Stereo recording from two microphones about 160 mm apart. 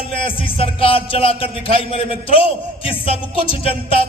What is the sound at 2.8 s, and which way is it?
A man's voice, 35° left (ahead or behind).